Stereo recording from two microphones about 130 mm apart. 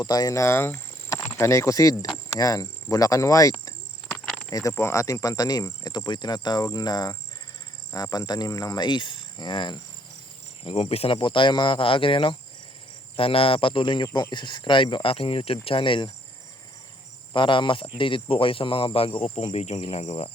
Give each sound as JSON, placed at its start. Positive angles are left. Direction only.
{"t": 0.0, "sound": "speech", "side_deg": 30}
{"t": 10.6, "sound": "speech", "side_deg": 45}
{"t": 17.3, "sound": "speech", "side_deg": 40}